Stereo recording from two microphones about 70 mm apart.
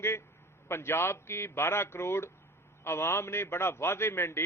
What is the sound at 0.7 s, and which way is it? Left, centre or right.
A man's voice, left.